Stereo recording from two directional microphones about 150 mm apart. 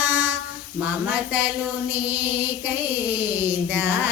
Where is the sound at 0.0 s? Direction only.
15° right (ahead or behind).